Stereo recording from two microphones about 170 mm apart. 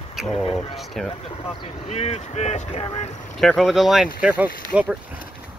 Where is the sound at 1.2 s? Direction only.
35° left (ahead or behind).